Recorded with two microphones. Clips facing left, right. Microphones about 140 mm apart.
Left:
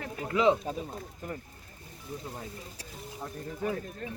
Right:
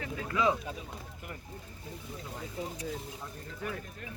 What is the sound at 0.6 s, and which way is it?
Speech, 40° left (ahead or behind).